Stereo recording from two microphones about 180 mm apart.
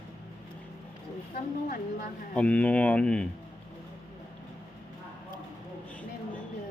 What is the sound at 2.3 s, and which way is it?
Speech, 5° left (ahead or behind).